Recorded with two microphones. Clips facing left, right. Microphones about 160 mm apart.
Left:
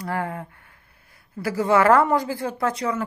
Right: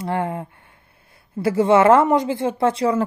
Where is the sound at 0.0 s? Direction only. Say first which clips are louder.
Right 4 dB; 25° right (ahead or behind).